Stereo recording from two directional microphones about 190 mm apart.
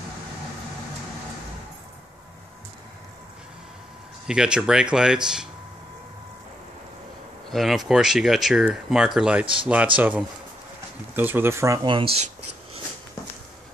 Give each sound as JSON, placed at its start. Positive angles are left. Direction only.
{"t": 4.3, "sound": "speech", "side_deg": -5}
{"t": 7.5, "sound": "speech", "side_deg": 0}